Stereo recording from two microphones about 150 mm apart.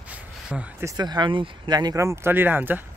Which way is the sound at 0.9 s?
30° right (ahead or behind).